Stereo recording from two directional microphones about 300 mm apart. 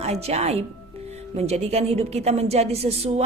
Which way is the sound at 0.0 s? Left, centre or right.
Right.